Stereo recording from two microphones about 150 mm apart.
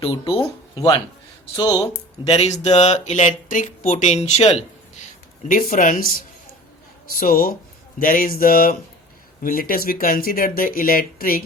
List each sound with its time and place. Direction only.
0.0 s speech: 40° left (ahead or behind)
1.5 s speech: 25° left (ahead or behind)
2.2 s speech: 45° left (ahead or behind)
5.5 s speech: 65° left (ahead or behind)